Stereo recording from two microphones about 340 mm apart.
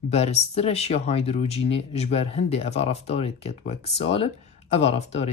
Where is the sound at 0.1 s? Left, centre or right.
Centre.